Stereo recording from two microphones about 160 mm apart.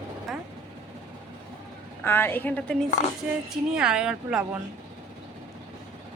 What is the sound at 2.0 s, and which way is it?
Speech, 15° left (ahead or behind).